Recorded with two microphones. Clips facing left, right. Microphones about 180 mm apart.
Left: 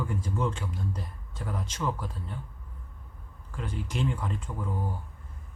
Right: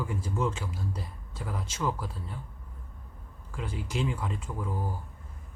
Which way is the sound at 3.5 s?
5° right (ahead or behind).